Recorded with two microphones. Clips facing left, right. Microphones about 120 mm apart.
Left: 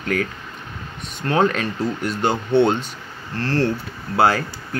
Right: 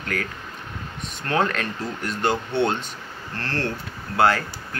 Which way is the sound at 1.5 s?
10° left (ahead or behind).